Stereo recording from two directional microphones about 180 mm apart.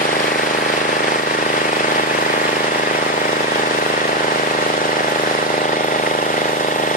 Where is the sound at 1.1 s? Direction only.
50° left (ahead or behind).